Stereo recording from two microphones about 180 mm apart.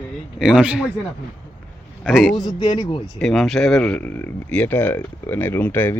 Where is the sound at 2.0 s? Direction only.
5° right (ahead or behind).